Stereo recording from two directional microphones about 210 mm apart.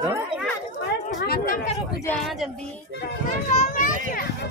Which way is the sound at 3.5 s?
35° left (ahead or behind).